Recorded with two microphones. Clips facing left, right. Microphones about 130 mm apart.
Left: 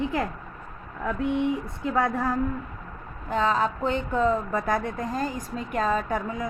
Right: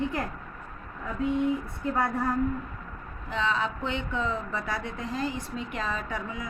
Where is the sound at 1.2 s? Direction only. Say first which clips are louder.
Even; 65° left (ahead or behind).